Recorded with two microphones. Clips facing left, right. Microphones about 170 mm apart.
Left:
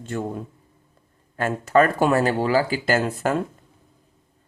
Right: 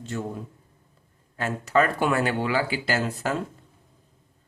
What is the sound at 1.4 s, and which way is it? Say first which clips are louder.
Speech: left 4 dB; 50° left (ahead or behind).